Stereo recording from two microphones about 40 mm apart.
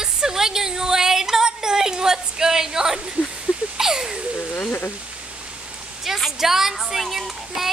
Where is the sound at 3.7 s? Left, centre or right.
Centre.